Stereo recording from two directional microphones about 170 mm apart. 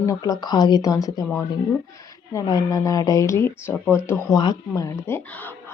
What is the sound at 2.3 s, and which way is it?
A woman's voice, 20° left (ahead or behind).